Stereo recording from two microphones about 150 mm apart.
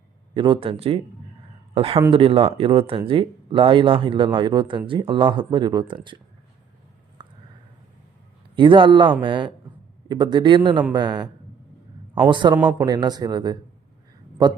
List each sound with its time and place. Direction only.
0.3 s speech: 35° right (ahead or behind)
8.5 s speech: 35° right (ahead or behind)
12.3 s speech: 30° right (ahead or behind)